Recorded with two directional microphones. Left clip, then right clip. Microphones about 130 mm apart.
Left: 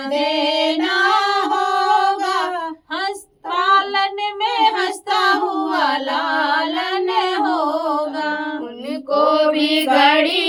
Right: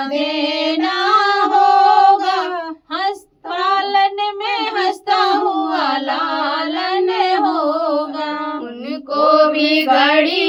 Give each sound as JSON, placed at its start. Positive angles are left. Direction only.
{"t": 0.1, "sound": "music", "side_deg": 40}
{"t": 3.6, "sound": "child singing", "side_deg": 40}
{"t": 9.1, "sound": "mantra", "side_deg": -35}
{"t": 9.6, "sound": "mantra", "side_deg": -5}